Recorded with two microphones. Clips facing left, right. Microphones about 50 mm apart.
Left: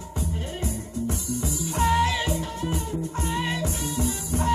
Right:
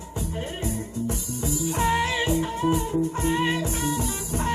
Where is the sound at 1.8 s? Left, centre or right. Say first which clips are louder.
Left 2 dB; centre.